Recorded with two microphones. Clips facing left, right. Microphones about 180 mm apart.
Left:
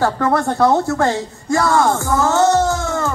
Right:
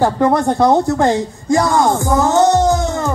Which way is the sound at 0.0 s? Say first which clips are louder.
Right 3 dB; 15° right (ahead or behind).